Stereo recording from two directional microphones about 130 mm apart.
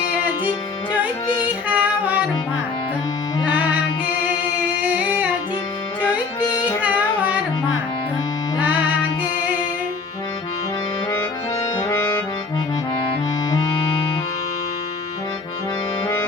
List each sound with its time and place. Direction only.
1.6 s female singing: 10° right (ahead or behind)
4.8 s music: 10° right (ahead or behind)
6.4 s music: 35° left (ahead or behind)
6.8 s singing: 10° right (ahead or behind)
11.8 s accordion: 20° left (ahead or behind)